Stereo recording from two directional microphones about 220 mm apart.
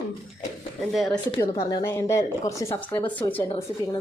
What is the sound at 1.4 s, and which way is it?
A woman's voice, 15° left (ahead or behind).